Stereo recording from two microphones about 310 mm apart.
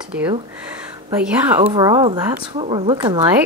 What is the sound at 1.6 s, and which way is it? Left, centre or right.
A woman's voice, centre.